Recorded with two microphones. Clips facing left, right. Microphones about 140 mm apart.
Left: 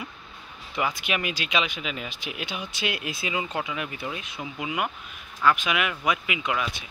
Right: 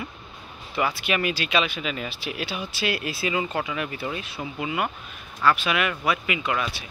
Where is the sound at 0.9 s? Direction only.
15° left (ahead or behind).